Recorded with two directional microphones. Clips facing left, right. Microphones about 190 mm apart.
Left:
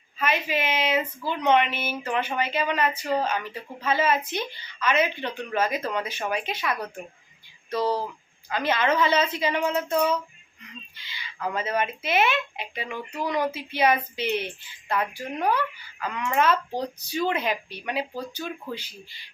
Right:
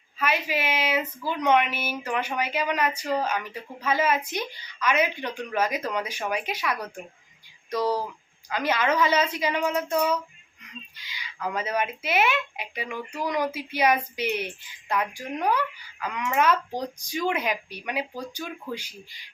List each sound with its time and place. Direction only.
0.2 s a woman's voice: 10° right (ahead or behind)
3.0 s speech: 10° left (ahead or behind)
3.2 s a woman's voice: 10° right (ahead or behind)
8.4 s a woman's voice: 10° right (ahead or behind)